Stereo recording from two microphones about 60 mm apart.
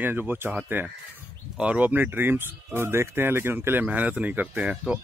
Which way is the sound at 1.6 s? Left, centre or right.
Right.